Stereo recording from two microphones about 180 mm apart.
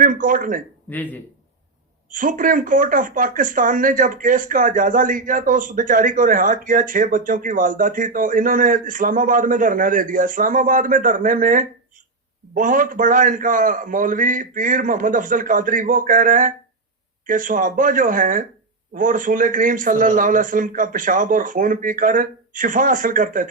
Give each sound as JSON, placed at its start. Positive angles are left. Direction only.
{"t": 0.0, "sound": "speech", "side_deg": -50}
{"t": 0.9, "sound": "speech", "side_deg": 10}
{"t": 2.0, "sound": "speech", "side_deg": -50}